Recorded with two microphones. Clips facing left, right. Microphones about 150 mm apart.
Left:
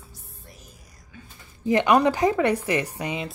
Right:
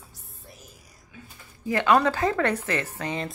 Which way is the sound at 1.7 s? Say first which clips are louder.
Left 2 dB; 20° left (ahead or behind).